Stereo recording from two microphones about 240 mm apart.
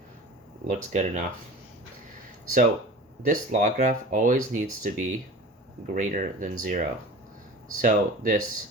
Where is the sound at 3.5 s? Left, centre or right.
Right.